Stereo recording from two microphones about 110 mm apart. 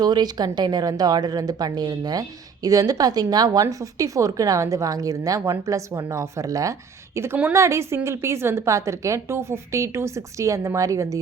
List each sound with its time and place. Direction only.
0.0 s a woman's voice: 40° right (ahead or behind)